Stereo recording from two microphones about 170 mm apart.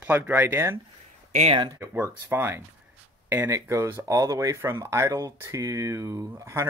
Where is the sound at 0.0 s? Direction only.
10° right (ahead or behind).